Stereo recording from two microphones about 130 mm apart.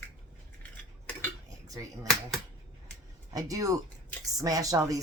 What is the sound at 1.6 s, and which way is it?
Finger snapping, 25° right (ahead or behind).